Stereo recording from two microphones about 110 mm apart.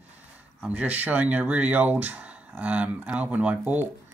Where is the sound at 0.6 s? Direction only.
10° right (ahead or behind).